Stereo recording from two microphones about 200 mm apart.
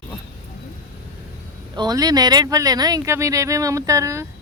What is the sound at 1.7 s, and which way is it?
Speech, 20° right (ahead or behind).